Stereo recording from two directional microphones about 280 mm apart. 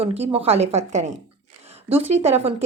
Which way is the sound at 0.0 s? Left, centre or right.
Right.